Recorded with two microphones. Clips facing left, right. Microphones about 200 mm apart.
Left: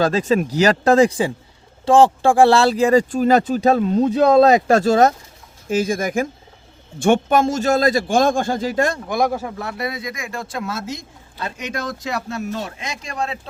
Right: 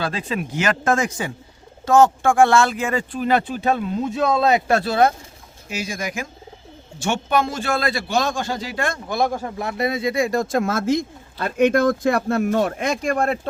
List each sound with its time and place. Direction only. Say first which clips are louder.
0.0 s a man's voice: left 8 dB; 40° left (ahead or behind)
9.0 s speech: left 2 dB; 15° left (ahead or behind)
9.6 s speech: right 3 dB; 20° right (ahead or behind); by 13.5 s 55° right (ahead or behind)